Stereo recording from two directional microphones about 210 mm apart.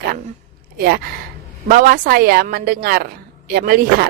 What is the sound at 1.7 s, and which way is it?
Speech, 40° right (ahead or behind).